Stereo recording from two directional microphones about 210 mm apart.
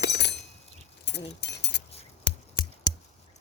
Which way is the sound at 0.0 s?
55° left (ahead or behind).